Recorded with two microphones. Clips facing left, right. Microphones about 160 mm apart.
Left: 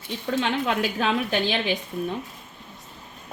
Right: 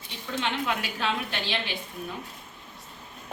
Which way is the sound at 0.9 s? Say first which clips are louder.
Left 6 dB; 45° left (ahead or behind).